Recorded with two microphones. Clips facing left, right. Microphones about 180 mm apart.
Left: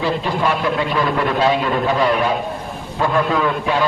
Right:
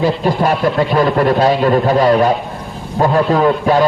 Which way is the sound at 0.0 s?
40° right (ahead or behind).